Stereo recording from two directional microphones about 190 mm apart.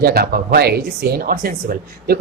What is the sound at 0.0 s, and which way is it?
A man's voice, 55° right (ahead or behind).